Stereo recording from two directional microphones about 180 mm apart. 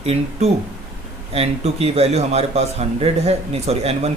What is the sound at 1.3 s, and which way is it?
A man's voice, 35° right (ahead or behind).